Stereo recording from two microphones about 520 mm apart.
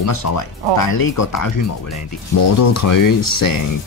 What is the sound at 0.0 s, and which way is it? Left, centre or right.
Speech, left.